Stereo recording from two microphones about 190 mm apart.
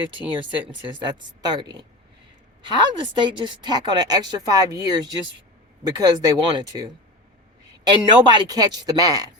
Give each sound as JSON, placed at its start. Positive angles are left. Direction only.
{"t": 0.3, "sound": "a woman's voice", "side_deg": -25}
{"t": 7.9, "sound": "a woman's voice", "side_deg": -25}